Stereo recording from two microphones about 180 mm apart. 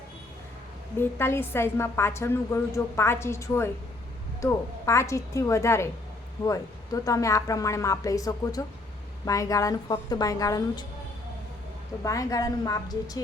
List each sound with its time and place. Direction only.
0.9 s a woman's voice: 15° left (ahead or behind)
12.0 s a woman's voice: 20° left (ahead or behind)